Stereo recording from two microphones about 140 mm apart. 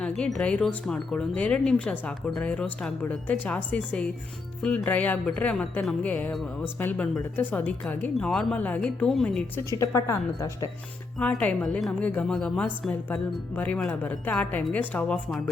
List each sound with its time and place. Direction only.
0.0 s speech: 5° left (ahead or behind)
9.8 s speech: 20° left (ahead or behind)
11.2 s speech: 10° left (ahead or behind)